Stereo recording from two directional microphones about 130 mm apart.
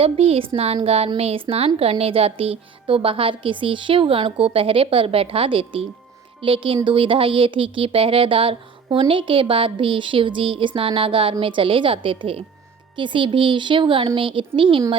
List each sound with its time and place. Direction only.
0.0 s speech: 50° right (ahead or behind)